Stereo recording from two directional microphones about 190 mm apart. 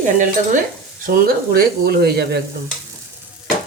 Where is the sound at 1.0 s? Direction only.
50° right (ahead or behind).